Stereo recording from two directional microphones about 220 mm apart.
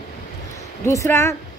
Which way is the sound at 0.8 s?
10° left (ahead or behind).